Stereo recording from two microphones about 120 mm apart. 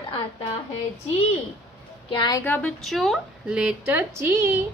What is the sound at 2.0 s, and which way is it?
Speech, 35° left (ahead or behind).